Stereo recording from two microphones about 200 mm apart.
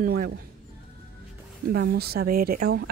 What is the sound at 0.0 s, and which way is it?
Speech, 45° right (ahead or behind).